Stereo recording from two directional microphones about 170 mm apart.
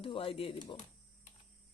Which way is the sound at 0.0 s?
30° left (ahead or behind).